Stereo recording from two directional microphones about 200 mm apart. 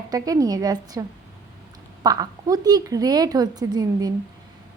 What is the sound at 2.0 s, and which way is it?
A woman's voice, 20° right (ahead or behind).